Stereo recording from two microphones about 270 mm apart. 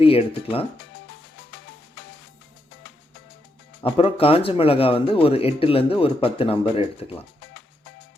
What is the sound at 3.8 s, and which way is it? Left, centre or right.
Speech, left.